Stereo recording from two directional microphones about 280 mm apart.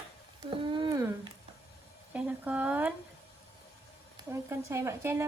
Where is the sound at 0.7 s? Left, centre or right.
Centre.